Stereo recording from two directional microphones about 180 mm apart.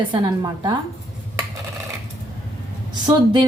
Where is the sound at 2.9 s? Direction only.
25° right (ahead or behind).